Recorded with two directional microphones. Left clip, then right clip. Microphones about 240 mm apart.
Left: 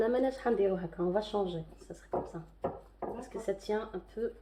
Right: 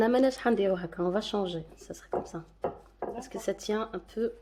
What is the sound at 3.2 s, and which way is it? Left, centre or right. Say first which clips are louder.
Speech: right 3 dB; right.